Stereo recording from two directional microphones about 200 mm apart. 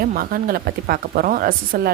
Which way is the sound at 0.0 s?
45° right (ahead or behind).